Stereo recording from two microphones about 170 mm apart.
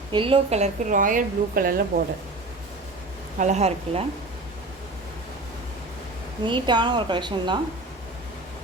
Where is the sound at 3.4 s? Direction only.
40° right (ahead or behind).